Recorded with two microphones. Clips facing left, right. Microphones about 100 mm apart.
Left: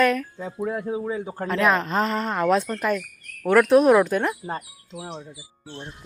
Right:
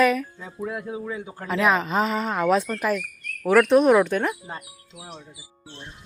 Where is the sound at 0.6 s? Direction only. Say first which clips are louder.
Left 3 dB; 25° left (ahead or behind).